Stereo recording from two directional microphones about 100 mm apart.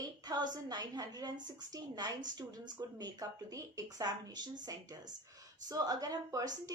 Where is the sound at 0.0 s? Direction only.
45° right (ahead or behind).